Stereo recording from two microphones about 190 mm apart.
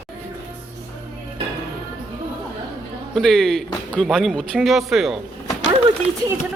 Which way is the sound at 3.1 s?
Centre (ahead or behind).